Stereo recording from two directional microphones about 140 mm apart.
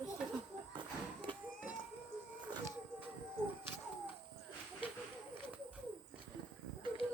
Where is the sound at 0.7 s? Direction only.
35° right (ahead or behind).